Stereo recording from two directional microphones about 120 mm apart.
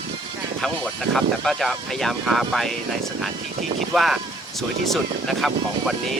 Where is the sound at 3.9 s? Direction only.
Centre (ahead or behind).